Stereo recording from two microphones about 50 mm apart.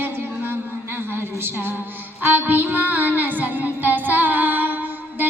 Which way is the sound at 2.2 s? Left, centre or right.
Right.